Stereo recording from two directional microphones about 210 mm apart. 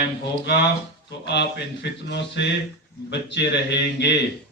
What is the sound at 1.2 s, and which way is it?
A man's voice, 55° left (ahead or behind).